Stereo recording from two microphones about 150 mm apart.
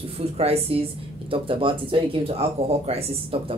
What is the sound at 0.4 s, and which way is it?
Speech, 40° right (ahead or behind).